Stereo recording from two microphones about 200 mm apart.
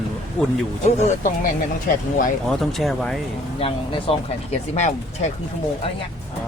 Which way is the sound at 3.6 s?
30° left (ahead or behind).